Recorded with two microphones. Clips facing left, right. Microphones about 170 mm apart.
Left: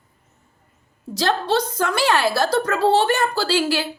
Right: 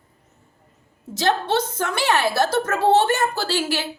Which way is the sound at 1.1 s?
20° right (ahead or behind).